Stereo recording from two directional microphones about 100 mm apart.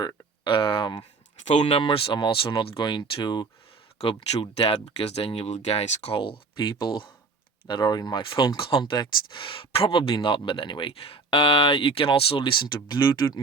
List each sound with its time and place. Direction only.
0.4 s a sound: 60° left (ahead or behind)
1.5 s speech: 65° left (ahead or behind)
2.1 s speech: 55° left (ahead or behind)
4.0 s speech: 70° left (ahead or behind); by 8.2 s 45° left (ahead or behind)
8.2 s speech: 60° left (ahead or behind)
10.2 s speech: 55° left (ahead or behind)